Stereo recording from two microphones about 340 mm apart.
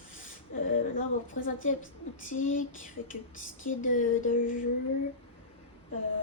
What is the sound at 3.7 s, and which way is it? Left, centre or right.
Speech, left.